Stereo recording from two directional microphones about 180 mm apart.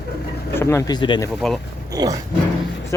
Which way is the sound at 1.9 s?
20° right (ahead or behind).